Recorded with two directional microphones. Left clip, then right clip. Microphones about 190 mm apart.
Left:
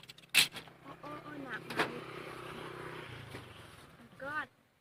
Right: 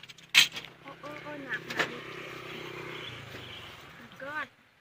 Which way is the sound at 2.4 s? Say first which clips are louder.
Right 4 dB; 40° right (ahead or behind).